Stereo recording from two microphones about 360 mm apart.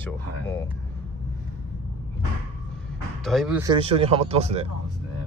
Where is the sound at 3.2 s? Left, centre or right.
Centre.